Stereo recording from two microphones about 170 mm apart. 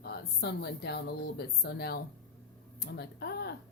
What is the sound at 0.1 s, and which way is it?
A woman's voice, 70° left (ahead or behind).